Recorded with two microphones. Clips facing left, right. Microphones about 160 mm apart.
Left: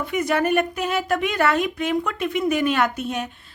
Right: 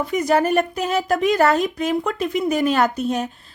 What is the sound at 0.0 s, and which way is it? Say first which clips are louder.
Speech: right 3 dB; 35° right (ahead or behind).